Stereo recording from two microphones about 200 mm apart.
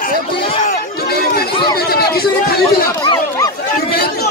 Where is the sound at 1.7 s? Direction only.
50° left (ahead or behind).